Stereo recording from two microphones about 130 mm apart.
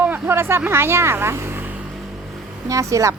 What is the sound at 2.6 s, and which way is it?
Speech, 25° right (ahead or behind).